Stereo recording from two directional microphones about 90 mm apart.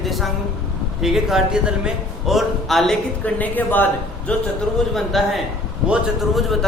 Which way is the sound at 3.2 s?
20° left (ahead or behind).